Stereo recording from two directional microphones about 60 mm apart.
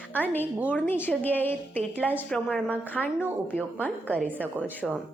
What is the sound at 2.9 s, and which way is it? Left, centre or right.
A woman's voice, left.